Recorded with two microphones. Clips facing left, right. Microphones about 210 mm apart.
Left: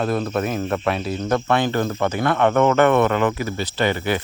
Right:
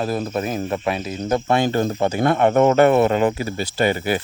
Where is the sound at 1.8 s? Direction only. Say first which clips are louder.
Right 2 dB; 30° right (ahead or behind).